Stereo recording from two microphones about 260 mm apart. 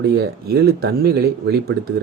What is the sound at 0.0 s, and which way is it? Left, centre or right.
Speech, right.